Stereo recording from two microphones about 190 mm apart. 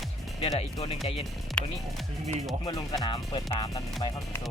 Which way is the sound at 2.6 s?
20° left (ahead or behind).